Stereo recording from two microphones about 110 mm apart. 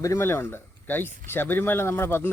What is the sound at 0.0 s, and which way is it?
Speech, 25° left (ahead or behind).